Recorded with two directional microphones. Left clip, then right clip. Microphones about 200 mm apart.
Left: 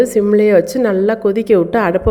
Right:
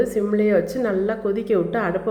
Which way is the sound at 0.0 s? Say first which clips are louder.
Left 9 dB; 40° left (ahead or behind).